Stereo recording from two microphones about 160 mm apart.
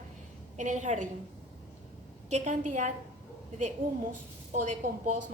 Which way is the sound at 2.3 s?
45° right (ahead or behind).